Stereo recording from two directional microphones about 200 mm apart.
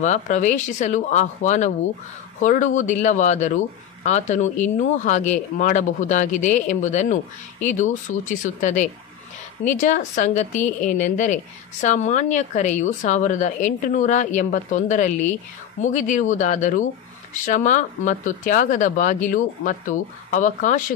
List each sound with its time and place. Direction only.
0.0 s a woman's voice: 35° left (ahead or behind)